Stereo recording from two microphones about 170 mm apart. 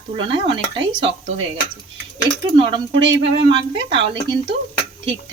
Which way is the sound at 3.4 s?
30° right (ahead or behind).